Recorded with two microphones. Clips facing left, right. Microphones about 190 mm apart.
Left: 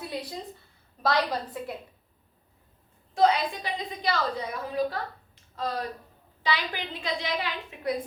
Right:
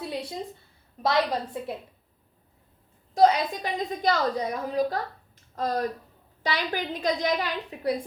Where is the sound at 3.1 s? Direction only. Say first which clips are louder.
Right 3 dB; 45° right (ahead or behind).